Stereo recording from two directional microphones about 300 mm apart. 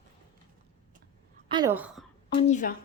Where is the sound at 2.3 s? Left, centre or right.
Left.